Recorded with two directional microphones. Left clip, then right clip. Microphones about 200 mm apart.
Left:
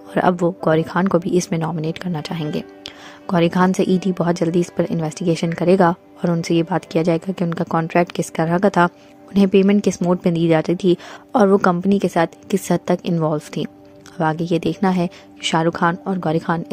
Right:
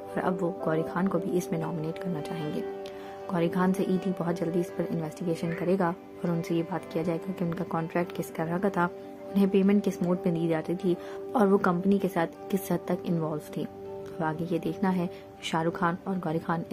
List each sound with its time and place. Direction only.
0.1 s a woman's voice: 45° left (ahead or behind)